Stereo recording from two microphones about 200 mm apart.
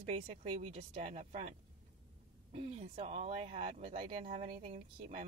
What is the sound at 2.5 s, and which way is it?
Speech, 30° right (ahead or behind).